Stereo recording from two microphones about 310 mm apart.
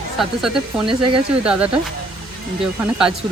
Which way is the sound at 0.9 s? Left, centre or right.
Centre.